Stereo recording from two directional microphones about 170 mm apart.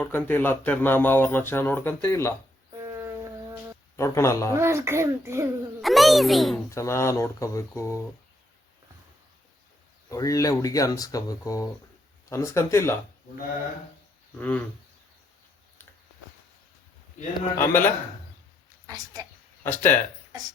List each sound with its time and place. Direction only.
0.0 s speech: 10° left (ahead or behind)
2.8 s shofar: 15° right (ahead or behind)
3.9 s speech: 15° left (ahead or behind)
4.5 s a child's voice: 15° right (ahead or behind)
5.8 s a child's voice: centre (ahead or behind)
6.7 s speech: 15° left (ahead or behind)
10.1 s speech: 20° left (ahead or behind)
14.3 s speech: 10° left (ahead or behind)
17.6 s speech: 15° left (ahead or behind)
18.9 s a woman's voice: 25° right (ahead or behind)
19.6 s speech: 10° left (ahead or behind)